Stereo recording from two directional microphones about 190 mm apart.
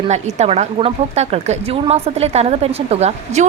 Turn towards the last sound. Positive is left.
turn(degrees=-35)  # may be behind; listen again after turning